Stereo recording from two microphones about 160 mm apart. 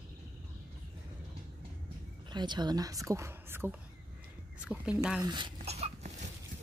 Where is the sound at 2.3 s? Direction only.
25° right (ahead or behind); by 5.2 s 5° right (ahead or behind).